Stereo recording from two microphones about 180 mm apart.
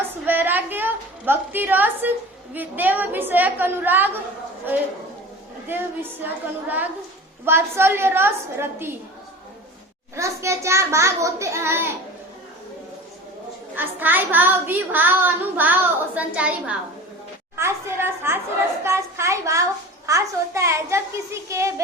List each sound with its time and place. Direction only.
0.3 s a woman's voice: 10° right (ahead or behind)
5.6 s a woman's voice: 10° right (ahead or behind)
10.2 s a woman's voice: 15° right (ahead or behind)
13.7 s a woman's voice: 10° right (ahead or behind)